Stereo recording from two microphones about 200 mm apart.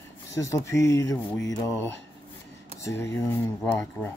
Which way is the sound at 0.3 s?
15° left (ahead or behind).